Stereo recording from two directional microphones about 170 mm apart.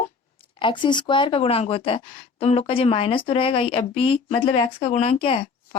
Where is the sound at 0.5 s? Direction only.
30° left (ahead or behind).